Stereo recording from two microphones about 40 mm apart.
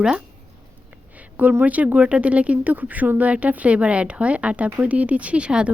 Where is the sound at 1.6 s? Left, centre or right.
Right.